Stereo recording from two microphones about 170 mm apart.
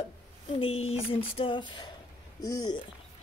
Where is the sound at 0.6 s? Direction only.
35° left (ahead or behind).